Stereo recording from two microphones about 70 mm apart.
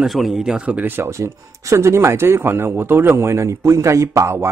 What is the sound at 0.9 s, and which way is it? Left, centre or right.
Speech, right.